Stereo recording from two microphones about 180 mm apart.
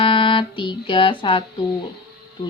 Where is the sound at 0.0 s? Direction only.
30° left (ahead or behind).